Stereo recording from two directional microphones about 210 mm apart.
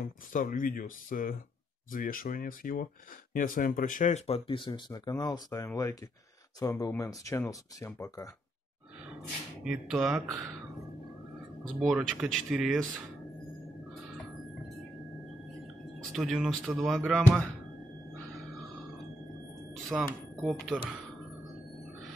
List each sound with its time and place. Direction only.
0.0 s speech: 40° left (ahead or behind); by 8.3 s 15° left (ahead or behind)
9.7 s speech: 5° right (ahead or behind)
11.8 s speech: centre (ahead or behind)
16.1 s speech: centre (ahead or behind)
19.9 s speech: centre (ahead or behind)